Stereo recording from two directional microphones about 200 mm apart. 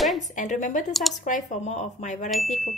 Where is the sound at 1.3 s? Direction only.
35° left (ahead or behind).